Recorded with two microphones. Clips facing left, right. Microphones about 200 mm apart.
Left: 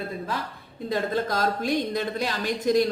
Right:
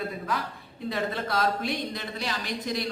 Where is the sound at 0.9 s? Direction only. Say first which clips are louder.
Left 4 dB; 40° left (ahead or behind).